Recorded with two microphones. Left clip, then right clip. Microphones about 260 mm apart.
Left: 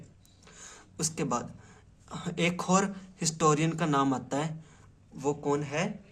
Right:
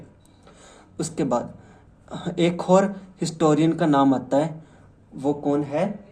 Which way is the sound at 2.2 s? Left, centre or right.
Left.